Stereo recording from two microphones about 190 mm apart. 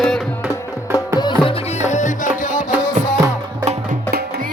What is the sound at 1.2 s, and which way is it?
Music, 25° left (ahead or behind).